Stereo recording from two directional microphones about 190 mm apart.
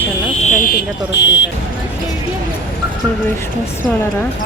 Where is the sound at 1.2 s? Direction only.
75° left (ahead or behind).